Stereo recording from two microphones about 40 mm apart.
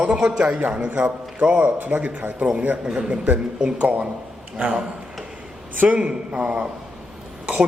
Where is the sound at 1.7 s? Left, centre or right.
Right.